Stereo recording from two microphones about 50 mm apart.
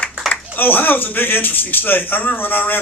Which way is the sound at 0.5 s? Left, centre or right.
Left.